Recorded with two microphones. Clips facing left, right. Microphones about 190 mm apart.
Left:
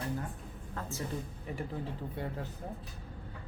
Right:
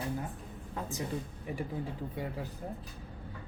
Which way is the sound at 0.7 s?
15° right (ahead or behind).